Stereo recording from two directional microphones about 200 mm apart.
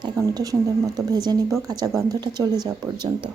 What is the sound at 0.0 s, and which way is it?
Speech, 20° right (ahead or behind).